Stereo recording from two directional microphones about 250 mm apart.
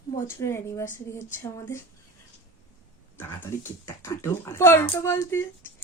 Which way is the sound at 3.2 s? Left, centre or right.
Centre.